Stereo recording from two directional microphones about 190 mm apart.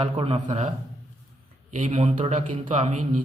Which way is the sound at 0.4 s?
40° right (ahead or behind).